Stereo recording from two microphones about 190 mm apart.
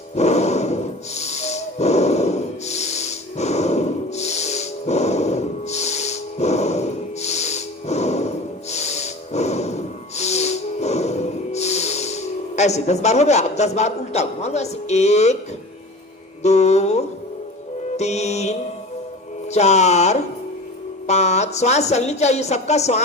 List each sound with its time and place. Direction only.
0.2 s music: 35° left (ahead or behind)
8.7 s snort: 35° left (ahead or behind)
16.4 s mantra: 35° left (ahead or behind)
17.9 s music: 35° left (ahead or behind)
21.1 s speech: 35° left (ahead or behind)